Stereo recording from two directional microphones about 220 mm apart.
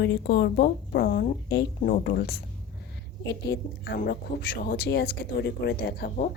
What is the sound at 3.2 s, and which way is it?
Speech, 50° left (ahead or behind).